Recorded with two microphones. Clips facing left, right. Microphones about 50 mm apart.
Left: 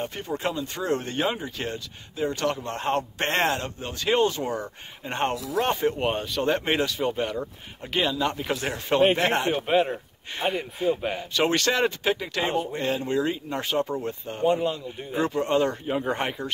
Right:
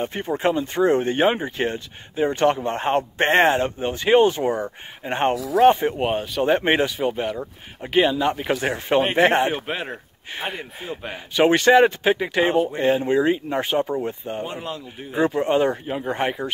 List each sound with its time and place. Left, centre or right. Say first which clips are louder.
0.0 s speech: right 6 dB; right; by 6.4 s centre
6.6 s speech: right 5 dB; right
7.0 s speech: right 3 dB; centre
7.9 s speech: right 6 dB; centre
9.7 s speech: left 6 dB; centre
11.3 s speech: right 9 dB; centre
14.4 s speech: left 7 dB; centre
15.0 s speech: right 5 dB; centre
15.9 s speech: right 2 dB; centre